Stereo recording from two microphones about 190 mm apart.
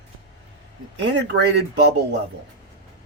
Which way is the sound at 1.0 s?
65° right (ahead or behind).